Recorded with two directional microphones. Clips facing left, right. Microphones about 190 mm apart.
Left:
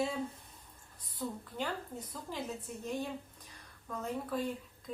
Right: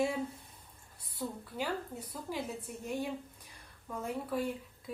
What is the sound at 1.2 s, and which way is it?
Speech, 10° right (ahead or behind).